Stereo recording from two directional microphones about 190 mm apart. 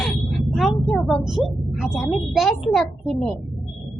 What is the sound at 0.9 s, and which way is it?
A woman's voice, centre (ahead or behind).